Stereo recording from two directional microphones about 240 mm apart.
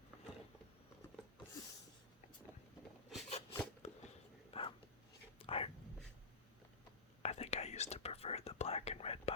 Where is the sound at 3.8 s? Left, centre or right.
Left.